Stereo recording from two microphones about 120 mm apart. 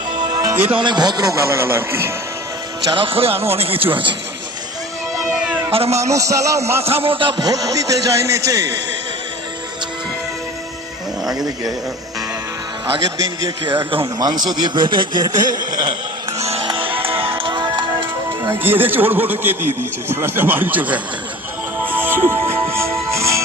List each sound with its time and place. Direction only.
0.5 s speech: 15° right (ahead or behind)
0.8 s a man's voice: 35° right (ahead or behind); by 2.1 s 20° right (ahead or behind)
2.9 s speech: 50° right (ahead or behind)
5.7 s a man's voice: 60° right (ahead or behind)
6.1 s a man's voice: 25° right (ahead or behind)
6.8 s speech: 55° right (ahead or behind)
7.4 s a man's voice: 30° right (ahead or behind)
11.3 s speech: 30° right (ahead or behind)
13.1 s speech: 30° right (ahead or behind)
16.4 s music: 60° right (ahead or behind)
16.6 s music: 45° right (ahead or behind)
18.6 s speech: 15° right (ahead or behind)
21.8 s music: 15° right (ahead or behind)